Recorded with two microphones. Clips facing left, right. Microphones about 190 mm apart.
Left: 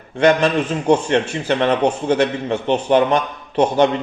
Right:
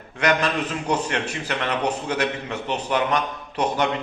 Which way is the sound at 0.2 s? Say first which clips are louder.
Left 7 dB; 30° left (ahead or behind).